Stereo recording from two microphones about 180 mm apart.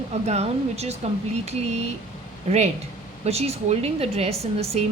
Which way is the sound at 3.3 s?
35° right (ahead or behind).